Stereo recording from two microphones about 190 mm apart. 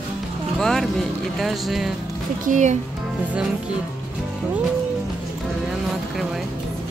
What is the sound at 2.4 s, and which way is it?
Speech, 40° right (ahead or behind).